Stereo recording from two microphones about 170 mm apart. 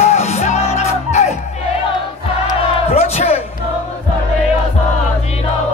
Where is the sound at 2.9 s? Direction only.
35° left (ahead or behind).